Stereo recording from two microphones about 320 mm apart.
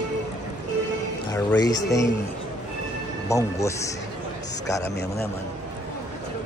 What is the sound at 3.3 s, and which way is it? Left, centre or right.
Speech, centre.